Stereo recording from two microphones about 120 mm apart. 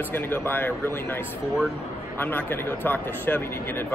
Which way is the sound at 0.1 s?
15° left (ahead or behind).